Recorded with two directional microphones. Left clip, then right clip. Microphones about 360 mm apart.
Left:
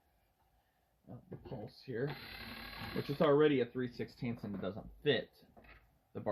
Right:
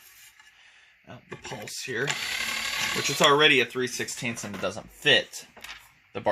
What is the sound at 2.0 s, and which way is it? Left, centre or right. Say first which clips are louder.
Mechanisms: right 17 dB; centre.